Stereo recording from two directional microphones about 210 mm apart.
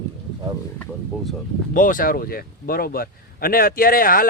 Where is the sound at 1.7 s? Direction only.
40° left (ahead or behind).